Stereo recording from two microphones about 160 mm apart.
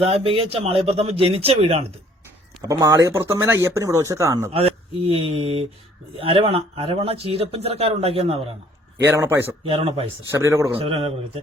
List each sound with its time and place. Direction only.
0.0 s speech: 35° right (ahead or behind)
2.6 s speech: 20° right (ahead or behind)
4.5 s speech: 40° right (ahead or behind)
9.0 s a man's voice: 15° right (ahead or behind)
9.6 s speech: 35° right (ahead or behind)
10.3 s speech: 20° right (ahead or behind)
10.8 s speech: 35° right (ahead or behind)